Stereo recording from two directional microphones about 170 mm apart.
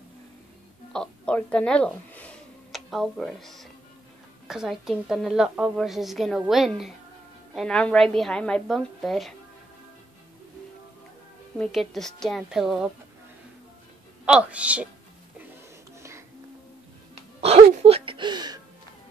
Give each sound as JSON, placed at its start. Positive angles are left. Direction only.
{"t": 0.9, "sound": "a woman's voice", "side_deg": 5}
{"t": 11.5, "sound": "a woman's voice", "side_deg": 5}
{"t": 14.2, "sound": "a woman's voice", "side_deg": -5}
{"t": 17.1, "sound": "music", "side_deg": -35}
{"t": 17.8, "sound": "a sound", "side_deg": -35}